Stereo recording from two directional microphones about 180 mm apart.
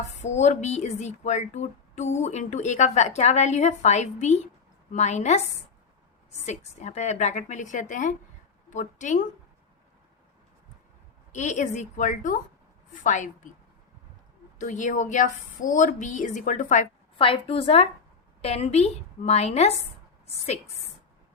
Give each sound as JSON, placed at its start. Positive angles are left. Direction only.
{"t": 0.2, "sound": "speech", "side_deg": 40}
{"t": 6.4, "sound": "a woman's voice", "side_deg": 40}
{"t": 11.3, "sound": "a woman's voice", "side_deg": 40}
{"t": 14.6, "sound": "a woman's voice", "side_deg": 45}
{"t": 17.2, "sound": "speech", "side_deg": 30}